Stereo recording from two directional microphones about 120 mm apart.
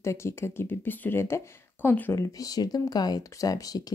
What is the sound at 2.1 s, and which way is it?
Speech, 30° left (ahead or behind).